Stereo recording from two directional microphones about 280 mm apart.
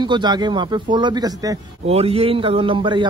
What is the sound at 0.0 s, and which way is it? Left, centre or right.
Speech, centre.